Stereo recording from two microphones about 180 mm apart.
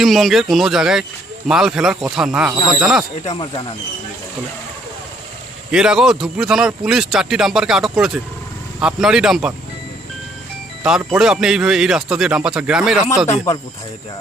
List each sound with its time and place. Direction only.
0.0 s a man's voice: centre (ahead or behind)
3.2 s speech: 25° left (ahead or behind)
5.7 s a man's voice: 5° right (ahead or behind)
10.8 s a man's voice: 5° right (ahead or behind)